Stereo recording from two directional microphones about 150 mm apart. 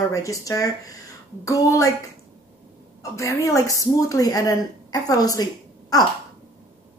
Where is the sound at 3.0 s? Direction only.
20° left (ahead or behind).